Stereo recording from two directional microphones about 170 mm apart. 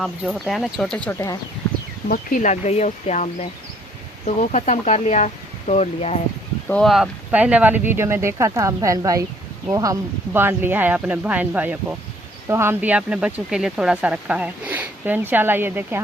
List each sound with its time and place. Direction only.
0.0 s speech: centre (ahead or behind)
2.0 s speech: 50° left (ahead or behind)
4.3 s speech: 45° left (ahead or behind)
6.7 s speech: 5° left (ahead or behind); by 16.0 s 10° right (ahead or behind)